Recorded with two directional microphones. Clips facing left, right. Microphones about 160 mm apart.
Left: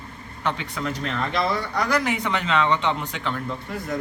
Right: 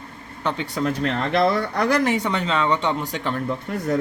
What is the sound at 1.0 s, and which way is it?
Speech, 55° right (ahead or behind).